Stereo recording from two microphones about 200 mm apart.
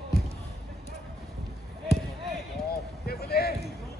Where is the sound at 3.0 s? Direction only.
50° left (ahead or behind).